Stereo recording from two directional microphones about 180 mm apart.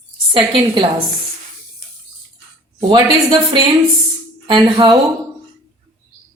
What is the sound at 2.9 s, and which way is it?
Speech, 25° right (ahead or behind).